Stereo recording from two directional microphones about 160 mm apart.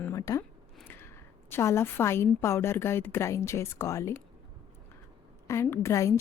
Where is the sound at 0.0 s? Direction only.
20° left (ahead or behind).